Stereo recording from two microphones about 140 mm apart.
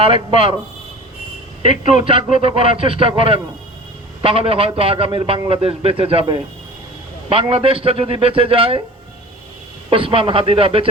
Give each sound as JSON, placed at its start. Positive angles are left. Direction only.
{"t": 0.0, "sound": "speech", "side_deg": -40}
{"t": 1.6, "sound": "speech", "side_deg": -40}
{"t": 9.9, "sound": "speech", "side_deg": -40}